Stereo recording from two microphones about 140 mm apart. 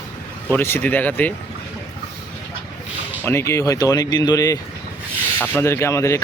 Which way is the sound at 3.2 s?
15° left (ahead or behind).